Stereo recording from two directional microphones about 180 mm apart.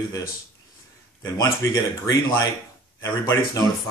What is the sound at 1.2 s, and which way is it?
A man's voice, 15° left (ahead or behind).